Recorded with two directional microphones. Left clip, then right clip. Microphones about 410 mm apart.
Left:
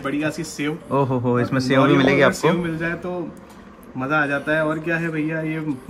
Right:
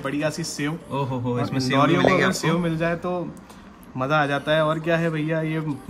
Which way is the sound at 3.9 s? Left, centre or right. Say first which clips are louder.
Left 1 dB; right.